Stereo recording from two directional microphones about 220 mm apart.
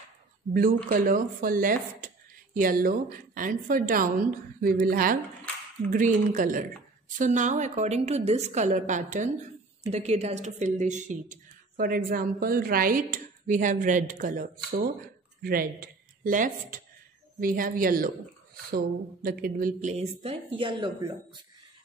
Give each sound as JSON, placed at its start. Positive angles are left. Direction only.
{"t": 0.5, "sound": "a woman's voice", "side_deg": -40}